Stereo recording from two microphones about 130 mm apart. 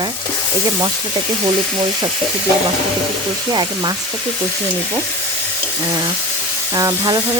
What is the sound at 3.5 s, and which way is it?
Speech, 30° right (ahead or behind).